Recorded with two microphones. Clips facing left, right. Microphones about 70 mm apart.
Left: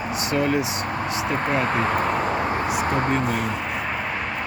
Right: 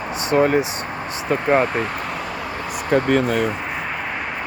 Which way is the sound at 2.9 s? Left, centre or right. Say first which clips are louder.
Right 9 dB; left.